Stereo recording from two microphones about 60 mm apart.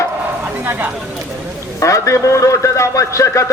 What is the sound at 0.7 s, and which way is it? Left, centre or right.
Speech, right.